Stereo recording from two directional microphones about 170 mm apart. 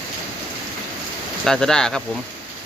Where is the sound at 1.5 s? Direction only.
5° left (ahead or behind).